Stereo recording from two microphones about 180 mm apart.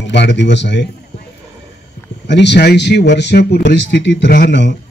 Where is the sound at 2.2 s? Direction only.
75° left (ahead or behind).